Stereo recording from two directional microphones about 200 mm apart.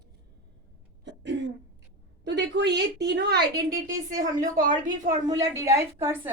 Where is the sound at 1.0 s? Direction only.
60° right (ahead or behind).